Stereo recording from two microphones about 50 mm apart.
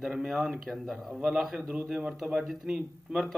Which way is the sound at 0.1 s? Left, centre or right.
Centre.